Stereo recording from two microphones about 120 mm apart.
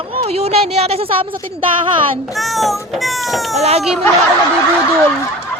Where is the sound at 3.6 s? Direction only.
60° right (ahead or behind).